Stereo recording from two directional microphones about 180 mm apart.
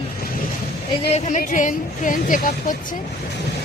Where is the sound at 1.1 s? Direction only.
40° left (ahead or behind).